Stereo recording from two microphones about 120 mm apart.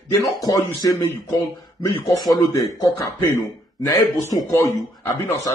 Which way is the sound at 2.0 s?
30° left (ahead or behind).